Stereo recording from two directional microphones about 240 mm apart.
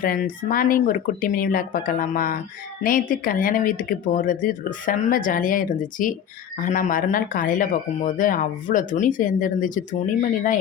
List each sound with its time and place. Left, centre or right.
0.0 s speech: left